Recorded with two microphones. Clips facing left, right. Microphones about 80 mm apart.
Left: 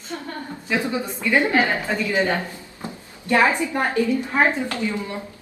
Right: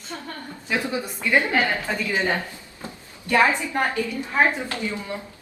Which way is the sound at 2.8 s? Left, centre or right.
Left.